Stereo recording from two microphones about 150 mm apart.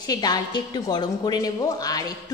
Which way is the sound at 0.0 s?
25° left (ahead or behind).